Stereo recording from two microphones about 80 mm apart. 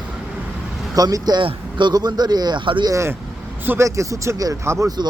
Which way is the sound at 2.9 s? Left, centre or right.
Right.